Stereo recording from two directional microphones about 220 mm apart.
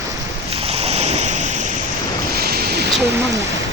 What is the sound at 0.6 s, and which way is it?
Ocean, 25° right (ahead or behind).